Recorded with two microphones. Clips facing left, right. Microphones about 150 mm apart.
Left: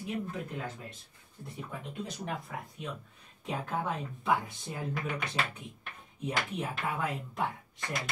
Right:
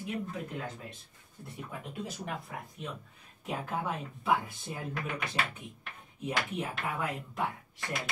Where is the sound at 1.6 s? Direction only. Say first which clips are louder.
Even; centre (ahead or behind).